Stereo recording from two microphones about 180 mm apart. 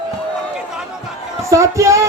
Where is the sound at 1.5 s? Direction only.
15° right (ahead or behind).